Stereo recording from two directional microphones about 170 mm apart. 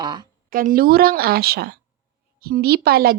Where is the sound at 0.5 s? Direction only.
55° right (ahead or behind).